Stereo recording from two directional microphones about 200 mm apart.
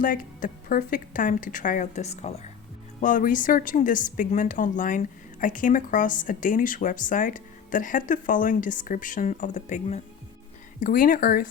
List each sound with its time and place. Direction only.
0.0 s a woman's voice: 45° left (ahead or behind)